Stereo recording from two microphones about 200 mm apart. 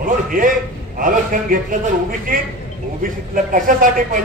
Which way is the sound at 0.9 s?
45° right (ahead or behind).